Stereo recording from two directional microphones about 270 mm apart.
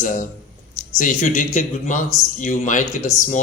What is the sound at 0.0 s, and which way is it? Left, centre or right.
Speech, left.